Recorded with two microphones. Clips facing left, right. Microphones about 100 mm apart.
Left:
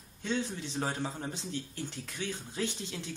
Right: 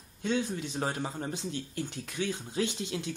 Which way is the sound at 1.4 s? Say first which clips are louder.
Right 3 dB; 55° right (ahead or behind).